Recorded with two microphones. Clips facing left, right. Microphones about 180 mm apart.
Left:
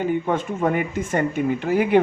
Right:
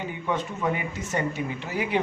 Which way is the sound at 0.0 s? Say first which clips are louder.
Left 7 dB; 50° left (ahead or behind).